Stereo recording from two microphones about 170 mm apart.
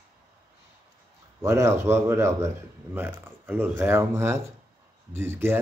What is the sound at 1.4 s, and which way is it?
Speech, 15° right (ahead or behind).